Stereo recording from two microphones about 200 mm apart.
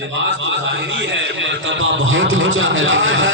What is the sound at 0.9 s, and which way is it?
A man's voice, 65° right (ahead or behind).